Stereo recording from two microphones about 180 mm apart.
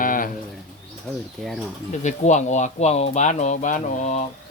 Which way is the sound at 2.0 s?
40° left (ahead or behind).